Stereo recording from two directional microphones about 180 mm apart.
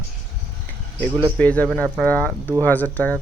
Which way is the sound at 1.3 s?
10° left (ahead or behind).